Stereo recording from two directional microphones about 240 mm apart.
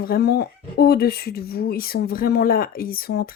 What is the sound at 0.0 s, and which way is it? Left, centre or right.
Speech, left.